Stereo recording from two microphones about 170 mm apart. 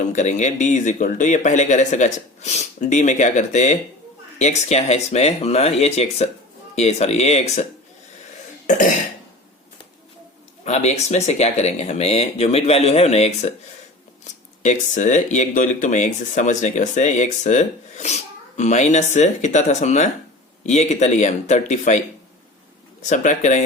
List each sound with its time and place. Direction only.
0.1 s speech: 45° left (ahead or behind)
8.7 s speech: 50° left (ahead or behind)
10.6 s speech: 40° left (ahead or behind)
14.6 s speech: 45° left (ahead or behind)
23.0 s speech: 45° left (ahead or behind)